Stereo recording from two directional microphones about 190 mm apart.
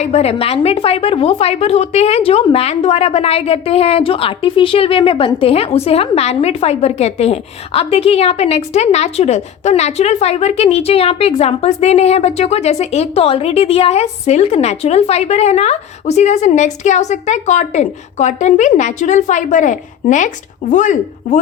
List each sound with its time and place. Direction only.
0.0 s a woman's voice: 35° left (ahead or behind)